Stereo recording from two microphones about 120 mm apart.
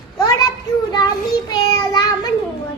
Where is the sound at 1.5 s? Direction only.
35° left (ahead or behind).